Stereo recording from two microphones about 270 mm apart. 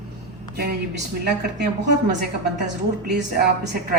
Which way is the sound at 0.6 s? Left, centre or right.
Right.